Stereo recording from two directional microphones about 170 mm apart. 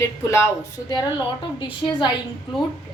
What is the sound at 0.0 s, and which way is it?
A woman's voice, 15° left (ahead or behind).